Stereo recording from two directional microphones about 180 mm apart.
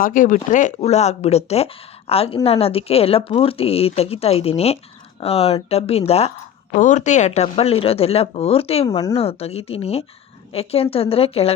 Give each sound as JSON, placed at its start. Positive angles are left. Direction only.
{"t": 0.0, "sound": "speech", "side_deg": 50}
{"t": 8.9, "sound": "speech", "side_deg": 20}
{"t": 9.1, "sound": "speech", "side_deg": 35}